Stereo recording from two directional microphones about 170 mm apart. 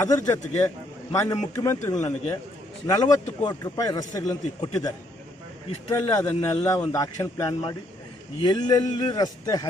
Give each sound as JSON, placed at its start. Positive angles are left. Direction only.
{"t": 0.0, "sound": "a man's voice", "side_deg": 20}